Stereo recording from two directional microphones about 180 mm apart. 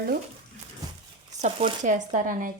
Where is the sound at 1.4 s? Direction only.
40° right (ahead or behind).